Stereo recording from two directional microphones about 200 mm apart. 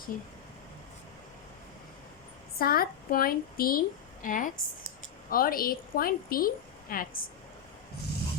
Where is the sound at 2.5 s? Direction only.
45° left (ahead or behind).